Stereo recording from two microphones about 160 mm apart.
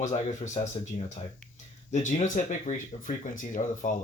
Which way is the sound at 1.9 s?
50° left (ahead or behind).